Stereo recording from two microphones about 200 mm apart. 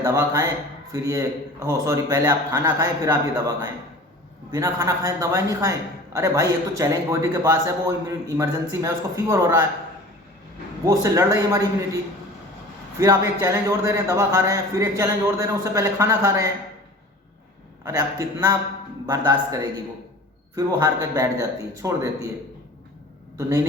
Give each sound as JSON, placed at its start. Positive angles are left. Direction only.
{"t": 0.0, "sound": "a man's voice", "side_deg": -15}
{"t": 10.8, "sound": "a man's voice", "side_deg": -15}
{"t": 13.0, "sound": "a man's voice", "side_deg": -15}
{"t": 17.8, "sound": "a man's voice", "side_deg": -15}
{"t": 23.4, "sound": "a man's voice", "side_deg": -15}